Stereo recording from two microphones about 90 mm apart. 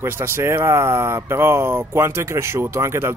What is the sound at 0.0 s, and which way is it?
Speech, 25° right (ahead or behind).